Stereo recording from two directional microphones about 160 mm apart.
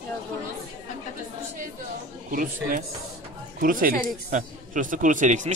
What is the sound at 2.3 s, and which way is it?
Speech, 60° right (ahead or behind).